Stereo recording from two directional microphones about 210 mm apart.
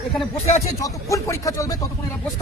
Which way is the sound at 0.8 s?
15° left (ahead or behind).